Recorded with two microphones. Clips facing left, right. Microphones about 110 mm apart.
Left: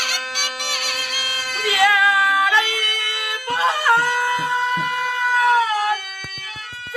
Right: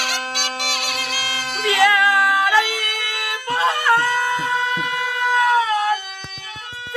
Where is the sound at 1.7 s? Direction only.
Centre (ahead or behind).